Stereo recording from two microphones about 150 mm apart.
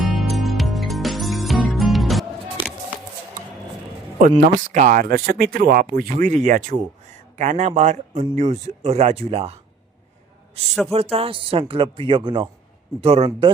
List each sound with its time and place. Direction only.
0.2 s music: centre (ahead or behind)
4.4 s speech: 60° right (ahead or behind)
10.9 s speech: 40° right (ahead or behind)